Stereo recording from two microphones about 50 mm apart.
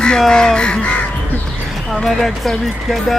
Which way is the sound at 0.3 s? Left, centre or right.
Centre.